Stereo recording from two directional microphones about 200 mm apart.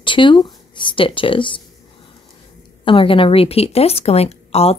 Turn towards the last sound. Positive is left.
turn(degrees=30)  # may be behind; listen again after turning